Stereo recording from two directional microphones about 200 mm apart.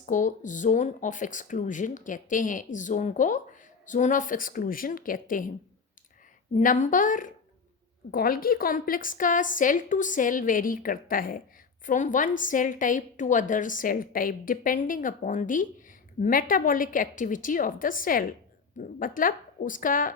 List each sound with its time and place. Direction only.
0.0 s a woman's voice: 40° left (ahead or behind)
6.5 s a woman's voice: 40° left (ahead or behind)